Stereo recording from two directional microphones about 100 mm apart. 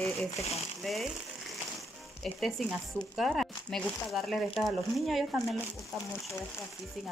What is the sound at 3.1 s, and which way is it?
Speech, centre (ahead or behind).